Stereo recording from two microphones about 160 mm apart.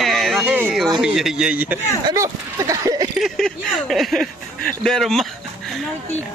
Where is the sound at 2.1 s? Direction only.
20° right (ahead or behind).